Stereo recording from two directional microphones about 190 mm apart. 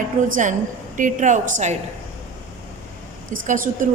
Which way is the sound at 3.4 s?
45° right (ahead or behind).